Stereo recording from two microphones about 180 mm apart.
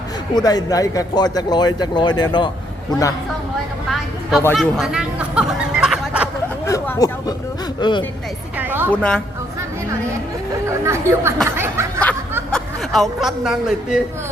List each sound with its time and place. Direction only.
0.3 s speech: 20° left (ahead or behind)
4.5 s speech: centre (ahead or behind)
6.7 s a sound: 15° left (ahead or behind)
7.8 s speech: 25° left (ahead or behind)
8.5 s speech: 10° right (ahead or behind)
8.9 s speech: 5° left (ahead or behind)
10.8 s speech: 15° right (ahead or behind)
11.4 s snicker: 15° right (ahead or behind)
12.5 s speech: centre (ahead or behind)